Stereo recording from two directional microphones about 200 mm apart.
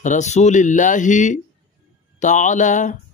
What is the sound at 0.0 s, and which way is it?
A man's voice, 35° left (ahead or behind).